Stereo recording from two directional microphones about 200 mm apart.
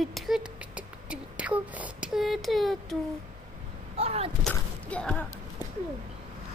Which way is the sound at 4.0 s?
30° right (ahead or behind).